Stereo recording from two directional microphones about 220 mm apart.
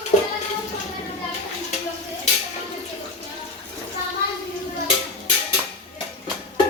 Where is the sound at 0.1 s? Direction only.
30° left (ahead or behind).